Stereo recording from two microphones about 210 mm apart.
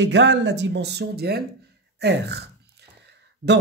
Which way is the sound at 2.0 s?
55° right (ahead or behind).